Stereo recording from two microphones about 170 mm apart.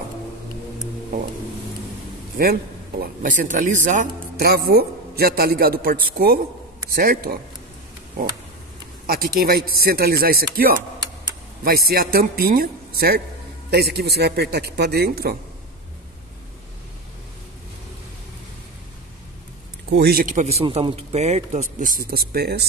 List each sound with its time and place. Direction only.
3.0 s speech: 55° right (ahead or behind)
4.4 s a man's voice: 65° right (ahead or behind)
9.0 s a man's voice: 60° right (ahead or behind)
19.9 s speech: 70° right (ahead or behind)